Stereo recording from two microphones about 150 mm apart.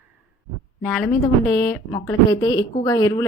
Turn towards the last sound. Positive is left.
turn(degrees=20)  # may be behind; listen again after turning